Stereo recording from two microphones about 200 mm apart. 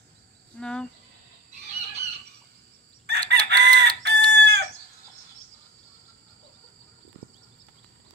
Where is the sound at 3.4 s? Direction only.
55° right (ahead or behind).